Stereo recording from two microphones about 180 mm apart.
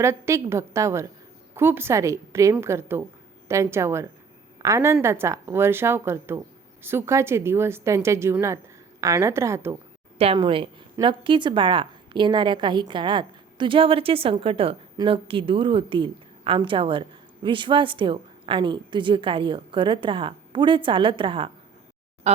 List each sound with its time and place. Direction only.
0.0 s a woman's voice: 15° right (ahead or behind)
10.2 s a woman's voice: 30° right (ahead or behind)